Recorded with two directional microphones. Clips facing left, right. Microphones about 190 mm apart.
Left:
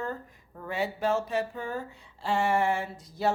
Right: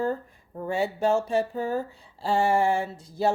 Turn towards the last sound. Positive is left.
turn(degrees=-30)  # may be behind; listen again after turning